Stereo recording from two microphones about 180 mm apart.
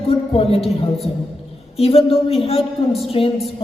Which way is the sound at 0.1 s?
35° left (ahead or behind).